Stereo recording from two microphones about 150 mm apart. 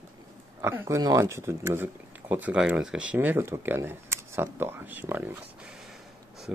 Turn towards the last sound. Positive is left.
turn(degrees=-10)  # may be behind; listen again after turning